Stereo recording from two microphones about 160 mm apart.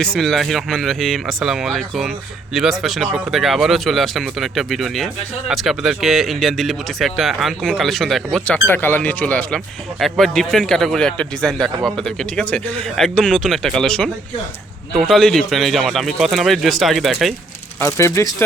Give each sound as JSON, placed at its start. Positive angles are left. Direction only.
{"t": 0.0, "sound": "speech", "side_deg": 5}
{"t": 17.7, "sound": "speech", "side_deg": 15}